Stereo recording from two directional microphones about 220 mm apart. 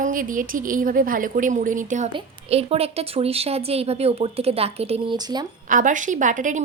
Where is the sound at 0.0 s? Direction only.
40° right (ahead or behind); by 5.5 s 20° right (ahead or behind).